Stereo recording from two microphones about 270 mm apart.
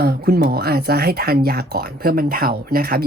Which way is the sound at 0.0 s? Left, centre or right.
Right.